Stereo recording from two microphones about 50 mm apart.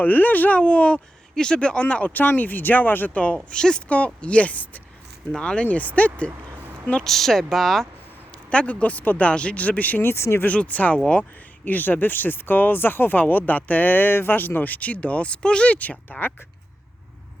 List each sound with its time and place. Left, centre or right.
0.0 s speech: left
3.3 s speech: centre; by 4.8 s left
5.3 s speech: left
5.6 s speech: left
7.0 s speech: centre
8.4 s speech: left
10.0 s speech: left
10.4 s speech: left